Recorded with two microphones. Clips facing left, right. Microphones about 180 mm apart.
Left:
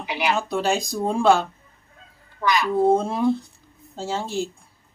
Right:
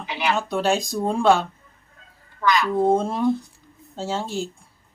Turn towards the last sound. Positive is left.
turn(degrees=0)  # may be behind; listen again after turning